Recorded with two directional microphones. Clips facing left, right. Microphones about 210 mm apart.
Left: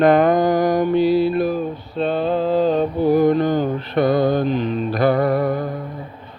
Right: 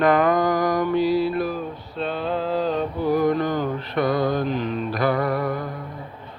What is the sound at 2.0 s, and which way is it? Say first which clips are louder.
Mantra: left 6 dB; 50° left (ahead or behind).